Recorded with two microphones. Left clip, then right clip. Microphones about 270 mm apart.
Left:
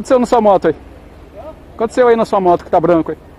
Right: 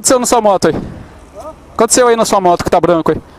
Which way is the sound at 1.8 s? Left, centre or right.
Right.